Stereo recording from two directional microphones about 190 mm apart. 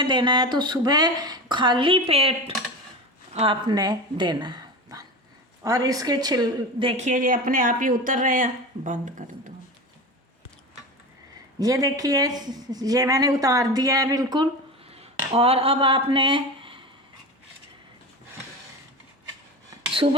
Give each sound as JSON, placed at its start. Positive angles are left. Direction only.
{"t": 0.0, "sound": "a woman's voice", "side_deg": -25}
{"t": 11.6, "sound": "speech", "side_deg": -20}
{"t": 14.8, "sound": "a sound", "side_deg": -30}